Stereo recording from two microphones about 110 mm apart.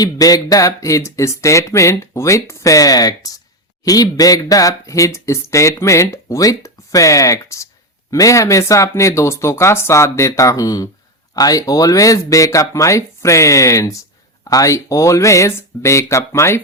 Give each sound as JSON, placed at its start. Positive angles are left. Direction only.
{"t": 0.0, "sound": "speech", "side_deg": 35}